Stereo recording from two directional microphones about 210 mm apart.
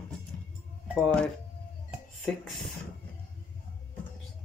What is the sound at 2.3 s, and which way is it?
Speech, 5° left (ahead or behind).